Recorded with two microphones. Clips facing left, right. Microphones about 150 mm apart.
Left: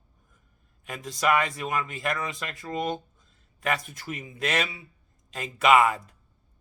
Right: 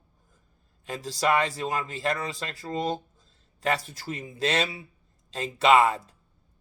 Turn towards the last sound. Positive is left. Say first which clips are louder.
# even
turn(degrees=-30)  # may be behind; listen again after turning